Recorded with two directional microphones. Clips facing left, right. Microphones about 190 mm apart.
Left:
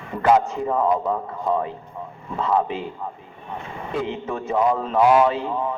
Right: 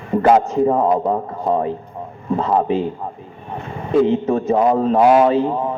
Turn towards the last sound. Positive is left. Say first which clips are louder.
# right 6 dB
turn(degrees=-35)  # may be behind; listen again after turning